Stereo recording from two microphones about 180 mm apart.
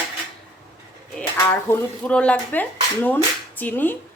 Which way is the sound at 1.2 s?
10° left (ahead or behind).